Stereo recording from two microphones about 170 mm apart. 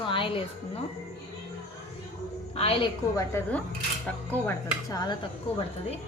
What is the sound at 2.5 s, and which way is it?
Speech, 35° left (ahead or behind).